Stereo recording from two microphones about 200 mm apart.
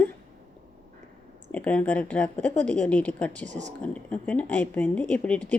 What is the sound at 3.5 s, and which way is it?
Speech, 35° right (ahead or behind).